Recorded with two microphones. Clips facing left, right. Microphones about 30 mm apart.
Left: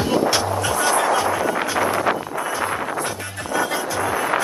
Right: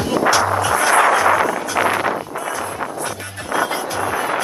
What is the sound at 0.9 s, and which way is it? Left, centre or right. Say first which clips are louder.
Artillery fire: right 5 dB; right.